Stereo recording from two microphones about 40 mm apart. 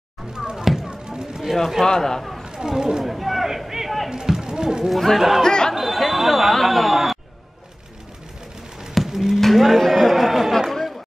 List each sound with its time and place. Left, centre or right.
0.8 s basketball bounce: right
1.5 s speech: centre
1.9 s a man's voice: centre
2.4 s chatter: centre
3.0 s a sound: centre
4.1 s a sound: centre
4.8 s speech: centre
5.4 s chatter: centre
5.8 s chatter: centre
8.9 s a sound: centre
9.8 s chatter: centre